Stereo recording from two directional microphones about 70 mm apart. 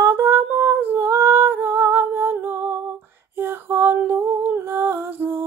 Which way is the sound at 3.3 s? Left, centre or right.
Right.